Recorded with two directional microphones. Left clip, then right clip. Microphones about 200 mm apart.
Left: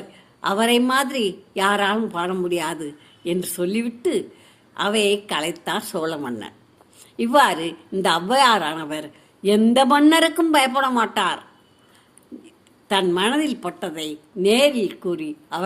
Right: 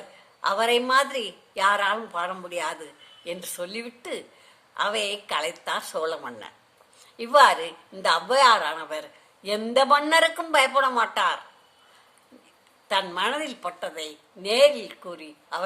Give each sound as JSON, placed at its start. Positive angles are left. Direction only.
{"t": 0.4, "sound": "a woman's voice", "side_deg": 25}
{"t": 12.9, "sound": "a woman's voice", "side_deg": 25}